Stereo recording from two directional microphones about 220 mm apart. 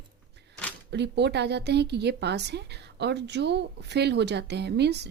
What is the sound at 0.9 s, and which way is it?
Speech, 50° right (ahead or behind).